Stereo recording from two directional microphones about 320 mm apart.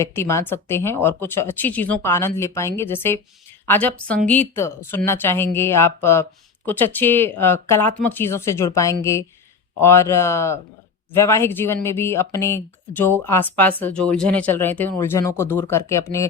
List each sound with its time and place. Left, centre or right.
0.0 s a woman's voice: centre